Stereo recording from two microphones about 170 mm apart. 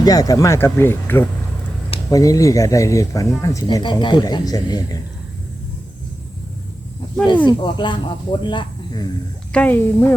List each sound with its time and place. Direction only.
0.0 s speech: 20° left (ahead or behind)
7.4 s speech: 25° left (ahead or behind)
9.5 s speech: 10° left (ahead or behind)